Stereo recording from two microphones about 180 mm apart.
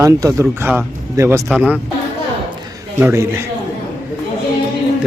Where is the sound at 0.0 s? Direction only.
20° right (ahead or behind).